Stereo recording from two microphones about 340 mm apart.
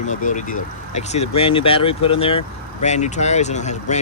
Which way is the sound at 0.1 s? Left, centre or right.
Left.